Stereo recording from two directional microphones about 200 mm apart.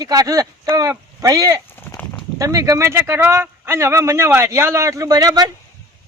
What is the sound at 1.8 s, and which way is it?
Horse, 10° left (ahead or behind).